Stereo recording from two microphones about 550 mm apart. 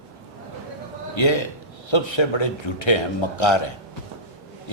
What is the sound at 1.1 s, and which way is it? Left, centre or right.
A man's voice, left.